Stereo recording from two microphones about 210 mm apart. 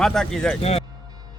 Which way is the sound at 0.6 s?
30° left (ahead or behind).